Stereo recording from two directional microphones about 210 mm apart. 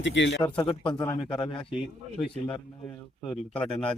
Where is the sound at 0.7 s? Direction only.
25° left (ahead or behind).